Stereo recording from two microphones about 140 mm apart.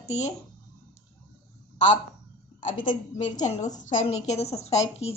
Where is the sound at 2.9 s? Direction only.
60° left (ahead or behind).